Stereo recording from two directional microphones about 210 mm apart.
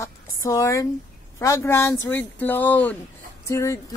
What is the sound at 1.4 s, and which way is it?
A woman's voice, 15° left (ahead or behind).